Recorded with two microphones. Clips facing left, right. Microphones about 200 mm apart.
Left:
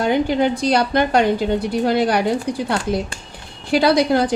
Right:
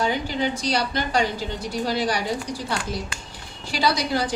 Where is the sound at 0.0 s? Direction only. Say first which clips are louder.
Left 7 dB; 60° left (ahead or behind).